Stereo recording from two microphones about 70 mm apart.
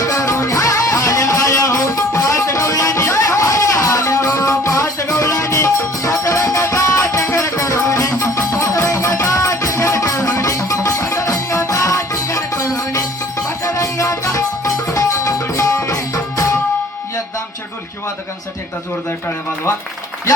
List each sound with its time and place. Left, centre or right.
0.0 s music: left